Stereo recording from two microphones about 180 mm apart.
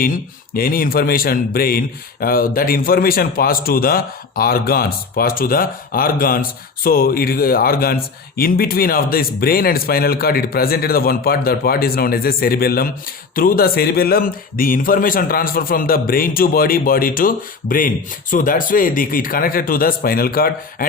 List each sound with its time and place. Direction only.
0.5 s a man's voice: 55° left (ahead or behind)